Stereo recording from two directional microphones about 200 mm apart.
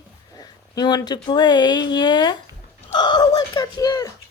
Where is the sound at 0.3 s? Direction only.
20° left (ahead or behind).